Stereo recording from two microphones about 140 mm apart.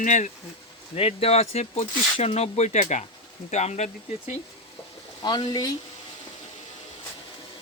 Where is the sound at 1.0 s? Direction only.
45° left (ahead or behind).